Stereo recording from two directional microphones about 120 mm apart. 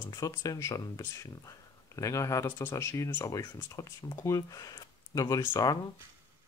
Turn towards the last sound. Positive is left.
turn(degrees=30)  # may be behind; listen again after turning